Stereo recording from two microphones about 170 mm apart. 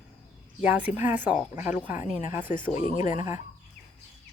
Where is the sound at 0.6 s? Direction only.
10° right (ahead or behind).